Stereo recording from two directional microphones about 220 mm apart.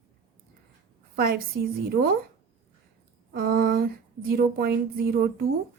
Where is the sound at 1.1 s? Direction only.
45° right (ahead or behind).